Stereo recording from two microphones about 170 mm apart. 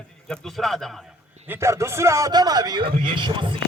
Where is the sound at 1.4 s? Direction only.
15° right (ahead or behind).